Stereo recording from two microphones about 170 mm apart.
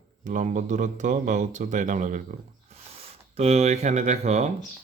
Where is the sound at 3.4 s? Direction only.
40° right (ahead or behind).